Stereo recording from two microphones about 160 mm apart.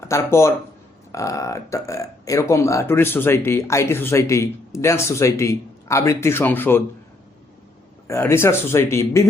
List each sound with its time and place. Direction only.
0.0 s speech: 15° left (ahead or behind)
8.0 s speech: 15° left (ahead or behind)